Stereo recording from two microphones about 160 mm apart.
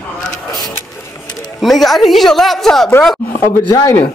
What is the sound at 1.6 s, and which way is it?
A woman's voice, centre (ahead or behind).